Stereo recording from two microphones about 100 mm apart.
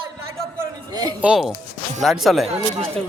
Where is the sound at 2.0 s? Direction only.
Centre (ahead or behind).